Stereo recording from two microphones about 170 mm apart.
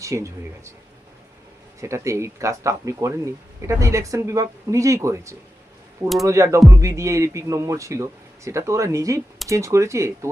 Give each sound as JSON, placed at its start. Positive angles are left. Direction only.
{"t": 0.0, "sound": "a man's voice", "side_deg": -15}
{"t": 1.8, "sound": "a man's voice", "side_deg": -15}